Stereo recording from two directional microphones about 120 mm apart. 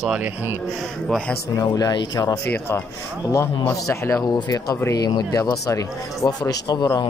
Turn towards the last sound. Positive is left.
turn(degrees=35)  # may be behind; listen again after turning